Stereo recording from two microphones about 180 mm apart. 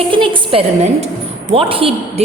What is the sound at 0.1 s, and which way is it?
A woman's voice, 30° right (ahead or behind).